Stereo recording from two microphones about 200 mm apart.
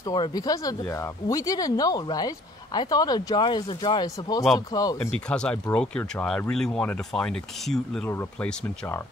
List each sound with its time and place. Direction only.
0.0 s speech: 20° left (ahead or behind)